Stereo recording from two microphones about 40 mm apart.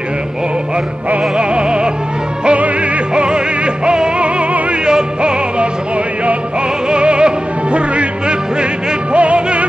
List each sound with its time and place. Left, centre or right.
1.3 s music: right
6.9 s music: right